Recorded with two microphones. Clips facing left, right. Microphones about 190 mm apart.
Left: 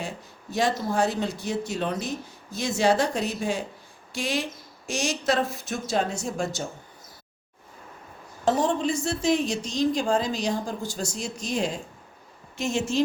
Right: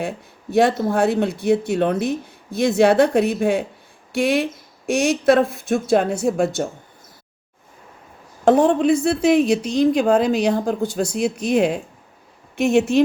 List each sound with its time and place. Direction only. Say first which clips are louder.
0.5 s speech: right 8 dB; 60° right (ahead or behind)
8.4 s speech: right 9 dB; 60° right (ahead or behind)